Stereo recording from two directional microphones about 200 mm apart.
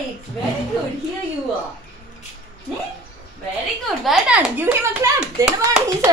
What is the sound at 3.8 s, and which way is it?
A child's voice, centre (ahead or behind).